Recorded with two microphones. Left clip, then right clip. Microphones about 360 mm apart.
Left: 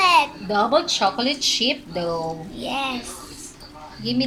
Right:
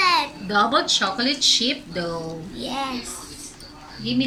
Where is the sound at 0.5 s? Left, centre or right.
Centre.